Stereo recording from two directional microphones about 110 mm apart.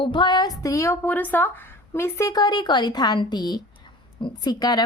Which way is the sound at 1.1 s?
15° left (ahead or behind).